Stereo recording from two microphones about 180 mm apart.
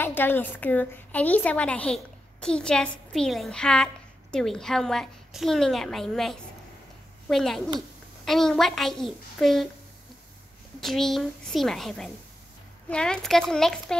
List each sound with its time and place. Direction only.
0.0 s a woman's voice: 10° left (ahead or behind)
10.8 s a woman's voice: centre (ahead or behind)